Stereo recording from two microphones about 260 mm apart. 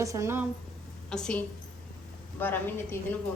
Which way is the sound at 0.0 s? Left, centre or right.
Centre.